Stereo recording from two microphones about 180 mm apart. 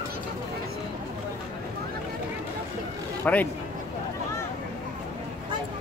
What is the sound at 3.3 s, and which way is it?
Speech, 5° left (ahead or behind).